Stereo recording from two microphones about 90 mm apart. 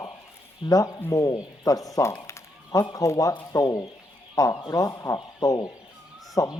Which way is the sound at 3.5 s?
40° left (ahead or behind).